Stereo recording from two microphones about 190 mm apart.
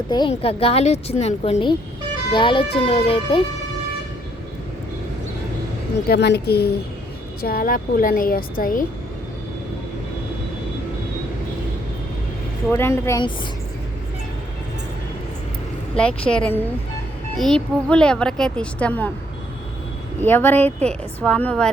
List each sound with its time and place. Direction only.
0.1 s a woman's voice: 25° left (ahead or behind)
6.1 s a woman's voice: 60° left (ahead or behind)
12.7 s a woman's voice: 15° left (ahead or behind)
16.3 s speech: 5° left (ahead or behind)
20.2 s a woman's voice: 10° left (ahead or behind)